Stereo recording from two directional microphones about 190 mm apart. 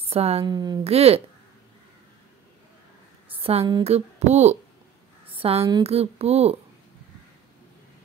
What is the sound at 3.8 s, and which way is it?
A woman's voice, 35° right (ahead or behind).